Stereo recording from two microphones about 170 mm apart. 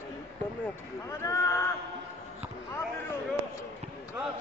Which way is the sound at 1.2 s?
15° left (ahead or behind).